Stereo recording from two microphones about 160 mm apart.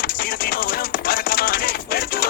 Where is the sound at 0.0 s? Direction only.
70° left (ahead or behind).